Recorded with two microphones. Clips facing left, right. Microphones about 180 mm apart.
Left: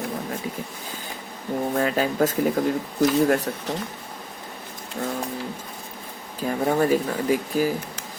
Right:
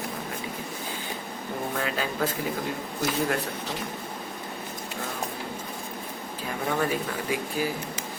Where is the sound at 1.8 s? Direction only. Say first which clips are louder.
Left 8 dB; 40° left (ahead or behind).